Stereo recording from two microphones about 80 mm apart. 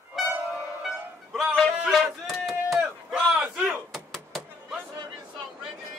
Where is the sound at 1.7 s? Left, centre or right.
Centre.